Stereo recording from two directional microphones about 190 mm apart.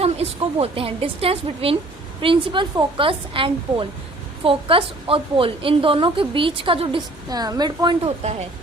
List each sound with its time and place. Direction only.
0.0 s a woman's voice: 30° right (ahead or behind)